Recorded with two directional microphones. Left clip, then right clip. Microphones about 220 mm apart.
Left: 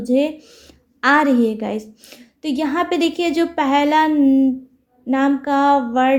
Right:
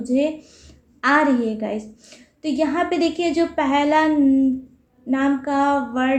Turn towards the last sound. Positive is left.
turn(degrees=45)  # may be behind; listen again after turning